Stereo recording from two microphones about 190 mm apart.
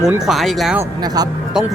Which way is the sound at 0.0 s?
5° right (ahead or behind).